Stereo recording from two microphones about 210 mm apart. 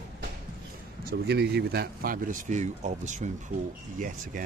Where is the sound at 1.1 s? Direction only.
50° right (ahead or behind).